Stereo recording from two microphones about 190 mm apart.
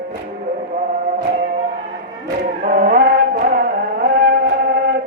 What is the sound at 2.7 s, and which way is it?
Music, 45° right (ahead or behind).